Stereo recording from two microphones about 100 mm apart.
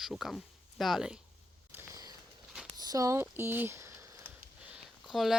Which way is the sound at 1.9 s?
40° right (ahead or behind).